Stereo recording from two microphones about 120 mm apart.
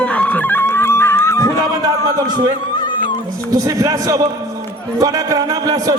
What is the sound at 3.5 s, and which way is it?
A man's voice, 30° right (ahead or behind).